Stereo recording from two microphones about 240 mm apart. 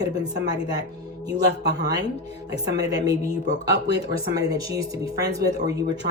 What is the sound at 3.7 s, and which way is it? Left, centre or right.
Speech, right.